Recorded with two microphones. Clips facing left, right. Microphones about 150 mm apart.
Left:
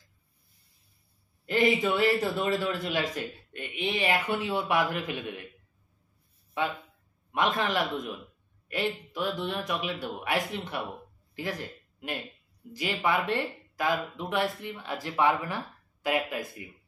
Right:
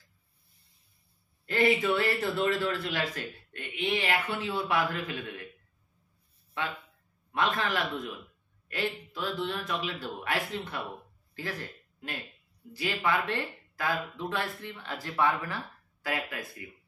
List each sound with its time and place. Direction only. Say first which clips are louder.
1.4 s speech: left 1 dB; 20° left (ahead or behind)
6.6 s a man's voice: left 4 dB; 15° left (ahead or behind)